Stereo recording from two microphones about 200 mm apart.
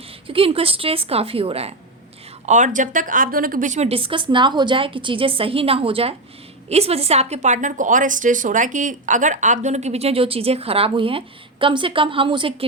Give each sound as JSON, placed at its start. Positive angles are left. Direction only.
{"t": 0.3, "sound": "a woman's voice", "side_deg": -25}